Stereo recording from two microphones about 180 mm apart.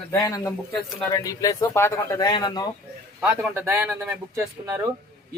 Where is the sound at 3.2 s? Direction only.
10° right (ahead or behind).